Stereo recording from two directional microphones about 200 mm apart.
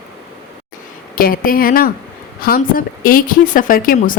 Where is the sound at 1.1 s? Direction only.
45° left (ahead or behind).